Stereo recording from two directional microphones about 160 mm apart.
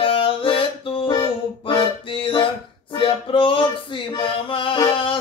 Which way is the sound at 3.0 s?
30° left (ahead or behind).